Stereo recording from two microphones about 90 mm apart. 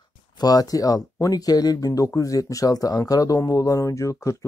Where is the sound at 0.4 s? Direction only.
45° left (ahead or behind).